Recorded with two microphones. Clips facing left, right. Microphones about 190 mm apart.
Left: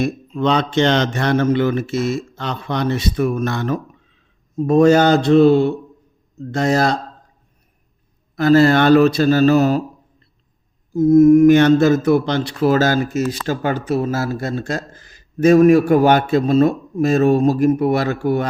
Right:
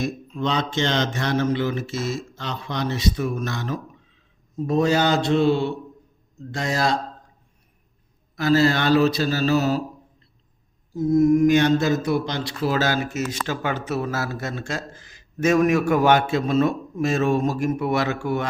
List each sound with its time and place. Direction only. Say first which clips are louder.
0.0 s a man's voice: left 6 dB; 60° left (ahead or behind)
8.4 s a man's voice: left 7 dB; 55° left (ahead or behind)
10.9 s a man's voice: left 8 dB; 50° left (ahead or behind)